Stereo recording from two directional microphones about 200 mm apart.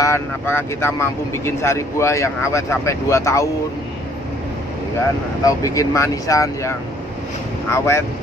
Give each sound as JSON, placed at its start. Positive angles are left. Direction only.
{"t": 0.0, "sound": "speech", "side_deg": 10}
{"t": 5.4, "sound": "speech", "side_deg": 15}